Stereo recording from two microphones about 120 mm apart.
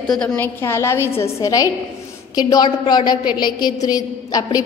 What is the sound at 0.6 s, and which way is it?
A woman's voice, 20° left (ahead or behind).